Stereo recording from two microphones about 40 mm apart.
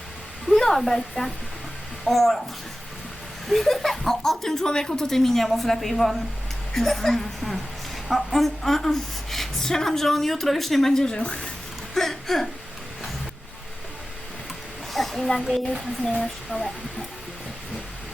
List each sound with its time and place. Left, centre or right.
0.8 s speech: centre
3.4 s a woman's voice: centre
11.9 s whimper: centre
14.9 s speech: centre
16.5 s speech: left